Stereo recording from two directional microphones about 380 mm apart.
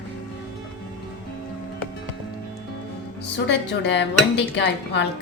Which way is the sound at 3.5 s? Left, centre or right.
Left.